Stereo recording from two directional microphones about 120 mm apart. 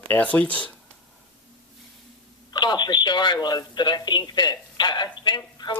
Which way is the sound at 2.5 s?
35° left (ahead or behind).